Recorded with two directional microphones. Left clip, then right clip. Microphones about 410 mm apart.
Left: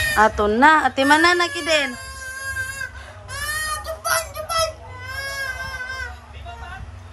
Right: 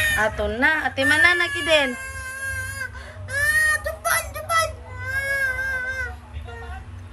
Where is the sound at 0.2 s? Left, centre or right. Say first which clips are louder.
Left 6 dB; centre.